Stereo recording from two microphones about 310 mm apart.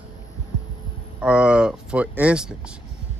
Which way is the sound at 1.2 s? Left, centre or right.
Centre.